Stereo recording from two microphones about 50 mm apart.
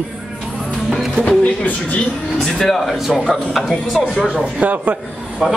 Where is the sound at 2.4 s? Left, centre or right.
Centre.